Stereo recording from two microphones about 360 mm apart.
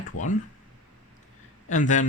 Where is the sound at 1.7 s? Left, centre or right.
Centre.